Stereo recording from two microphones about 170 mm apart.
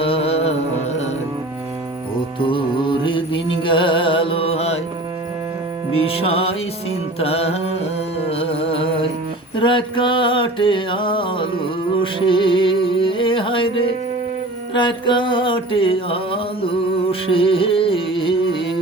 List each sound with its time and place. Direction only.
0.0 s music: 35° left (ahead or behind)
2.4 s music: 30° left (ahead or behind)
6.0 s music: 35° left (ahead or behind)
7.2 s carnatic music: 35° left (ahead or behind)
8.3 s music: 35° left (ahead or behind)
9.6 s mantra: 30° left (ahead or behind)
12.2 s music: 30° left (ahead or behind)